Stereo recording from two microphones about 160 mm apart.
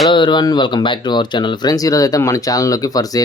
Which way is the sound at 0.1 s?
30° left (ahead or behind).